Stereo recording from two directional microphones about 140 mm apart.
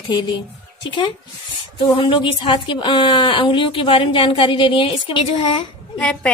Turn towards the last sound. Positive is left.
turn(degrees=10)  # may be behind; listen again after turning